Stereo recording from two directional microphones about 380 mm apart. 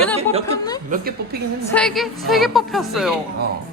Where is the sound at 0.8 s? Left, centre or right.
Right.